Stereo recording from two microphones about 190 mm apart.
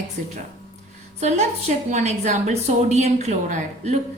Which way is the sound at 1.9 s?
35° right (ahead or behind).